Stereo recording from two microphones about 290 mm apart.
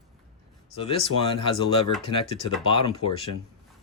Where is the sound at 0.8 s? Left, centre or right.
Centre.